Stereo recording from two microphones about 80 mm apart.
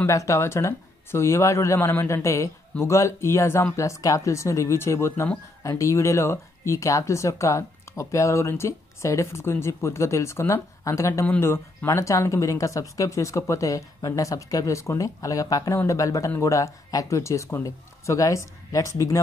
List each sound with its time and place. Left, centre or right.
0.0 s speech: left